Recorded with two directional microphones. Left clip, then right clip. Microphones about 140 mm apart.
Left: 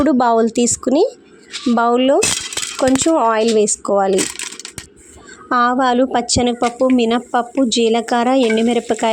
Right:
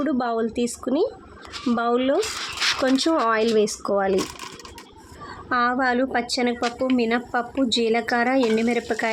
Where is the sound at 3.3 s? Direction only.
30° left (ahead or behind).